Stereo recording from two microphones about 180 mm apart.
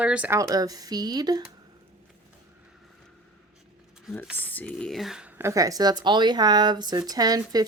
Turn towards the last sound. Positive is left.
turn(degrees=-20)  # may be behind; listen again after turning